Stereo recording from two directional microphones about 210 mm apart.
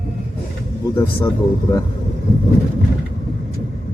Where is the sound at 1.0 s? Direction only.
10° left (ahead or behind).